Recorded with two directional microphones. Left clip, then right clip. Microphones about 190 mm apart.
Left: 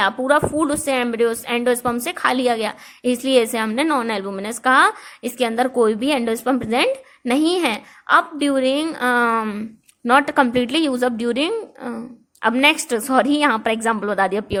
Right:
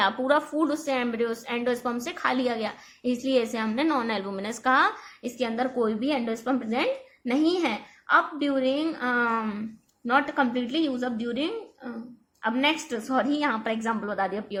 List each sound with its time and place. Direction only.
0.0 s a woman's voice: 35° left (ahead or behind)
10.1 s a woman's voice: 55° left (ahead or behind)